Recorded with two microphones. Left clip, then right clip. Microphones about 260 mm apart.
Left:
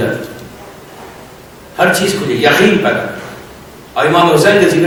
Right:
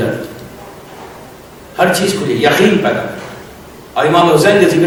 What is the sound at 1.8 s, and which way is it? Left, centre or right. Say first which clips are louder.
A man's voice: left 1 dB; centre.